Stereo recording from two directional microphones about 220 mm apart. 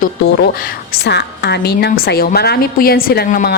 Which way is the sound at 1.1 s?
50° left (ahead or behind).